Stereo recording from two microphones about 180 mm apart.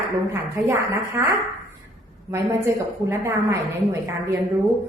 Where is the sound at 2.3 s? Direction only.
15° right (ahead or behind).